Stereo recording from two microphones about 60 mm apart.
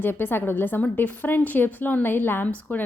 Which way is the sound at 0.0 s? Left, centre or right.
Left.